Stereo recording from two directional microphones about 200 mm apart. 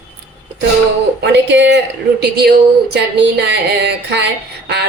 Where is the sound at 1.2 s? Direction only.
60° right (ahead or behind).